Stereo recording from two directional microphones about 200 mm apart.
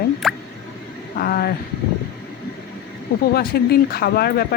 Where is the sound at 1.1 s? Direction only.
50° left (ahead or behind).